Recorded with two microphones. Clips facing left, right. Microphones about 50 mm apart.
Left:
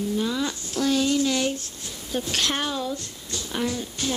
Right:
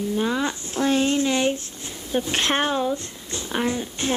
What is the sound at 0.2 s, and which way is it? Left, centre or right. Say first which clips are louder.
Speech: right 3 dB; right.